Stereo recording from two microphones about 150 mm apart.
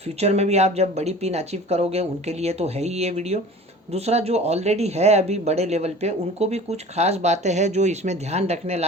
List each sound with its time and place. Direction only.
0.2 s speech: 45° right (ahead or behind)